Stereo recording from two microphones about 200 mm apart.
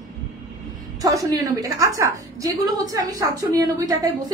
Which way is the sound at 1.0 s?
15° right (ahead or behind).